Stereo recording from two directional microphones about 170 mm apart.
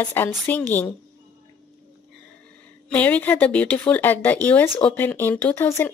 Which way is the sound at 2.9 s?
10° left (ahead or behind).